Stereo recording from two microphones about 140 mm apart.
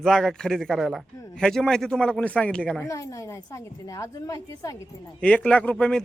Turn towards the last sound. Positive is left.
turn(degrees=5)  # may be behind; listen again after turning